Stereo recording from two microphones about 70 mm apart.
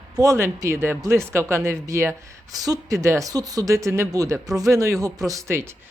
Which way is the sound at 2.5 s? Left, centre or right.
Right.